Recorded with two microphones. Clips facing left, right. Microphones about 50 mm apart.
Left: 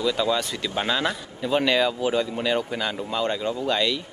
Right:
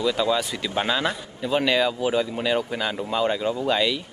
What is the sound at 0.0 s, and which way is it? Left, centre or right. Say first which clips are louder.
Speech: right 1 dB; centre.